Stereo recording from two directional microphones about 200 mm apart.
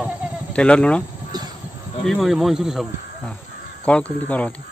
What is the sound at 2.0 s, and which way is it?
Speech, centre (ahead or behind).